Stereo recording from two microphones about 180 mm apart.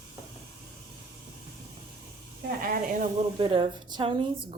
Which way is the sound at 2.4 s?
55° right (ahead or behind).